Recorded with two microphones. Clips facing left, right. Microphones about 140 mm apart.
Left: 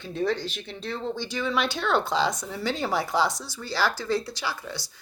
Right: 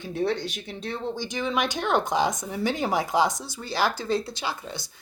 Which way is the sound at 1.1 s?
15° right (ahead or behind).